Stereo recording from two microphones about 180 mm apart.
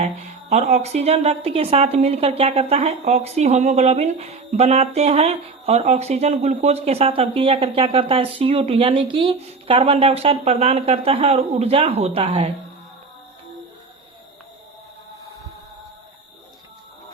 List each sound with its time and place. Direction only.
0.0 s speech: 40° right (ahead or behind)